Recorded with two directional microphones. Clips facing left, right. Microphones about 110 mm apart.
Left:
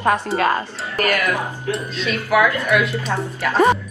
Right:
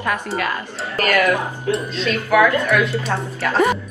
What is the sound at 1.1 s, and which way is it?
Speech, 20° right (ahead or behind).